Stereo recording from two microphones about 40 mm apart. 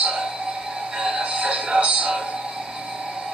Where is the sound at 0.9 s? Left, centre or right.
Right.